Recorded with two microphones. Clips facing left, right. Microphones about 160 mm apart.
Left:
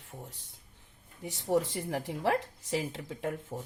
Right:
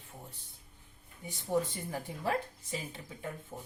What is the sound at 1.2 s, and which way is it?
A woman's voice, 85° left.